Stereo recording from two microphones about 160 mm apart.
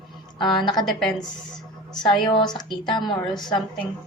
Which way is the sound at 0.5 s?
30° left (ahead or behind).